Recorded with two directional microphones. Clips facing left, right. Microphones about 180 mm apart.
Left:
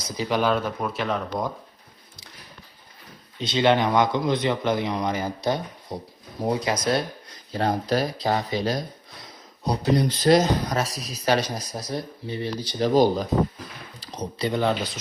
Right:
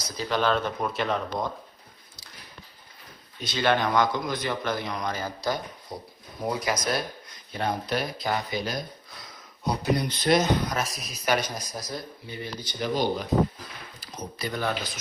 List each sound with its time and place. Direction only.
0.2 s speech: 15° left (ahead or behind)
3.3 s speech: 25° left (ahead or behind)
12.8 s speech: 40° left (ahead or behind); by 14.8 s 20° left (ahead or behind)